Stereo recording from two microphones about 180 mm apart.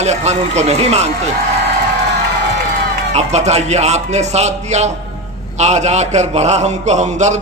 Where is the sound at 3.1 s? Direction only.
40° right (ahead or behind).